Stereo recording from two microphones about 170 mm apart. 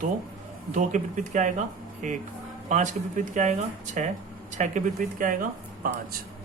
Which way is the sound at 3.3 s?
45° right (ahead or behind).